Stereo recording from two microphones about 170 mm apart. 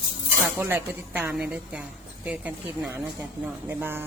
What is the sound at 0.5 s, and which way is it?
Speech, 10° right (ahead or behind).